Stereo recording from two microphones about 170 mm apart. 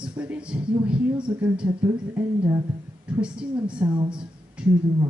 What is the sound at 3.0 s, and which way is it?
Speech, 5° right (ahead or behind).